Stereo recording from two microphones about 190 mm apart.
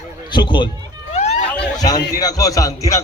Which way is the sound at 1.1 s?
35° left (ahead or behind).